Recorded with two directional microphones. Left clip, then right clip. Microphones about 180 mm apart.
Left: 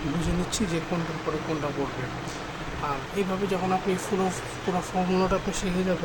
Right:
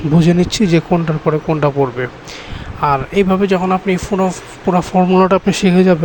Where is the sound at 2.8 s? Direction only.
55° right (ahead or behind).